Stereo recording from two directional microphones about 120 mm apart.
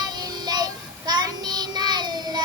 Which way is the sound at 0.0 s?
35° right (ahead or behind).